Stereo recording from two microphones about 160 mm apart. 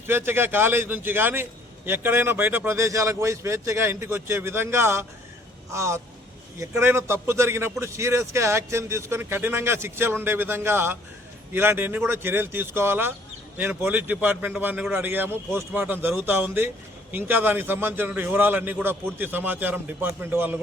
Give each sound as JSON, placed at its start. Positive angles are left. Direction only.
{"t": 0.1, "sound": "a man's voice", "side_deg": -15}